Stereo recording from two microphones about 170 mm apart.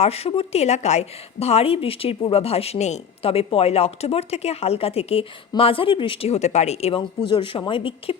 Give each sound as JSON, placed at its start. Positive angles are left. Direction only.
{"t": 0.0, "sound": "a woman's voice", "side_deg": 35}